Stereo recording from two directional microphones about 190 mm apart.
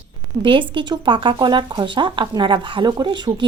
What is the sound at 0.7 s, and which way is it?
A woman's voice, 25° right (ahead or behind).